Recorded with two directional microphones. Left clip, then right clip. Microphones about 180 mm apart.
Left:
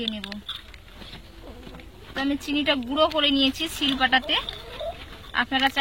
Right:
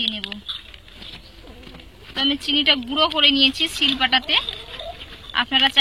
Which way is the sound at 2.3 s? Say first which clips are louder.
Right 6 dB; 15° left (ahead or behind).